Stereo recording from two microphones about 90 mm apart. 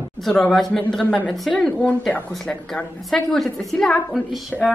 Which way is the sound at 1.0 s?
15° left (ahead or behind).